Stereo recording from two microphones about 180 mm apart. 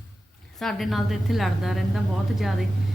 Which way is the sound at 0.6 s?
Centre (ahead or behind).